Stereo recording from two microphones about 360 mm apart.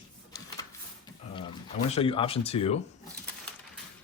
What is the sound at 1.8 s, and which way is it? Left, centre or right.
Speech, centre.